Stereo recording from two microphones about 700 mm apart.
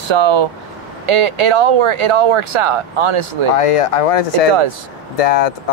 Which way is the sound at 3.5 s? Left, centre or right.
Left.